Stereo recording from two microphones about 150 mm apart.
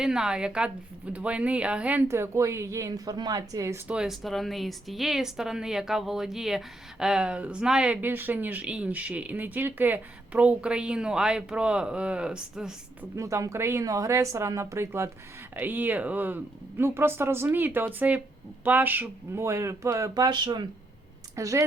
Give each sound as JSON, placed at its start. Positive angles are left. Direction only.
{"t": 0.0, "sound": "a woman's voice", "side_deg": -5}
{"t": 3.8, "sound": "speech", "side_deg": -5}
{"t": 13.1, "sound": "a woman's voice", "side_deg": -20}